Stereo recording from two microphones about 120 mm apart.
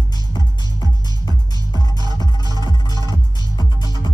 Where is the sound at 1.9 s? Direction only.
35° left (ahead or behind).